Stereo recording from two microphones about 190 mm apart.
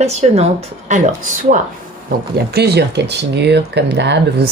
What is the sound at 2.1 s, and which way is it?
Speech, 60° right (ahead or behind).